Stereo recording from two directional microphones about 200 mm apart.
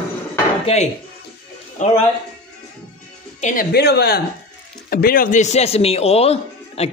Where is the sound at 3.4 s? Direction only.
45° left (ahead or behind).